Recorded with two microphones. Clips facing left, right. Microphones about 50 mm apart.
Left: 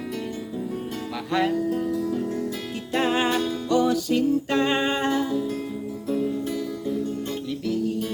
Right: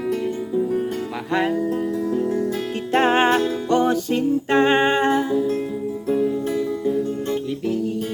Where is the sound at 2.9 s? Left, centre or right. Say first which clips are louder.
Right 6 dB; right.